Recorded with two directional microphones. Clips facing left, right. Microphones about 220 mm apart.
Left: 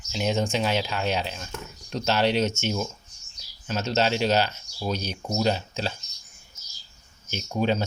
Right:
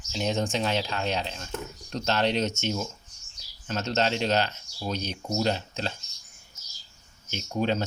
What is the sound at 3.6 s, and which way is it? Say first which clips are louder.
Speech: left 2 dB; 5° left (ahead or behind).